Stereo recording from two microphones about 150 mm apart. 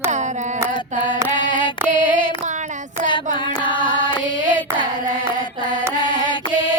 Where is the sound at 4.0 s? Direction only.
30° left (ahead or behind).